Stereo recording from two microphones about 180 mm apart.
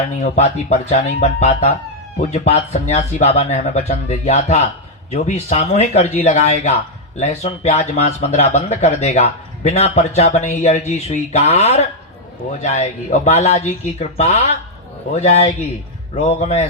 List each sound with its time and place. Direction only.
0.0 s speech: 40° left (ahead or behind)